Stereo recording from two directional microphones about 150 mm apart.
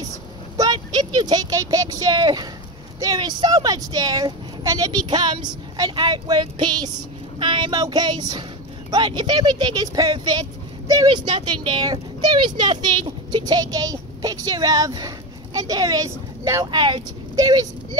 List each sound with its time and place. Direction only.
0.6 s speech: 30° right (ahead or behind)
16.7 s speech: 35° right (ahead or behind)